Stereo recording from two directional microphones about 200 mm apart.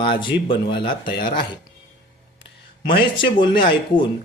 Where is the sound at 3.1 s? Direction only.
25° left (ahead or behind).